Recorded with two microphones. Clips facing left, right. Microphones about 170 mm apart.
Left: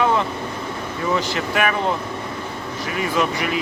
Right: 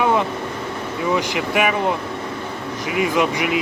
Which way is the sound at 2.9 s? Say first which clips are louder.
Right 3 dB; 15° right (ahead or behind).